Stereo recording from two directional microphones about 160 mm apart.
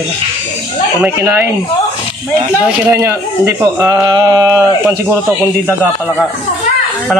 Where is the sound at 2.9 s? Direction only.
15° right (ahead or behind).